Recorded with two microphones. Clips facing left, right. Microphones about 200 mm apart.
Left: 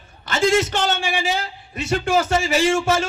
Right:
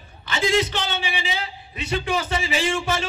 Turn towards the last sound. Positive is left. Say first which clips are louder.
# left 6 dB
turn(degrees=45)  # may be behind; listen again after turning